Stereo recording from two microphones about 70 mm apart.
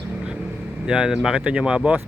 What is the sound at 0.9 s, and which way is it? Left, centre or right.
Speech, centre.